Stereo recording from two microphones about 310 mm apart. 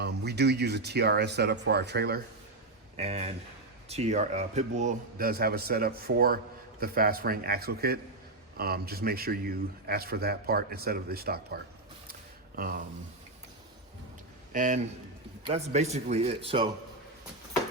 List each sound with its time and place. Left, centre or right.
0.0 s speech: right
2.9 s a man's voice: centre
12.5 s a sound: right
14.5 s a man's voice: right